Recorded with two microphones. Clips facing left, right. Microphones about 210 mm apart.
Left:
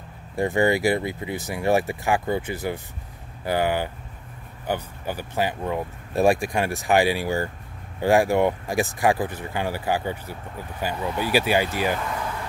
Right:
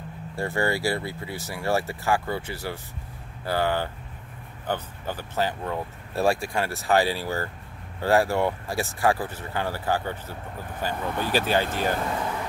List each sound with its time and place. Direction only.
0.4 s speech: 20° left (ahead or behind)